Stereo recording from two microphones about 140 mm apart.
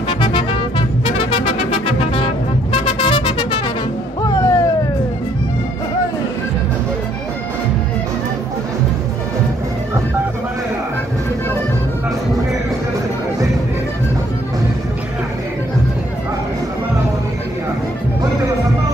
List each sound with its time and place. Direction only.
0.2 s music: 35° left (ahead or behind)
4.2 s music: 25° left (ahead or behind)